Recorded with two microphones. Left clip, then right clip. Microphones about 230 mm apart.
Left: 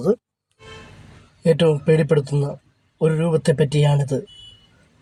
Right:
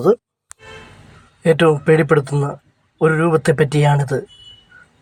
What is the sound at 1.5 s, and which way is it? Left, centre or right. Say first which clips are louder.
Speech: right 5 dB; centre.